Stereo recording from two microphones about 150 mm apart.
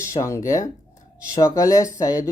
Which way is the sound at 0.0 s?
20° left (ahead or behind).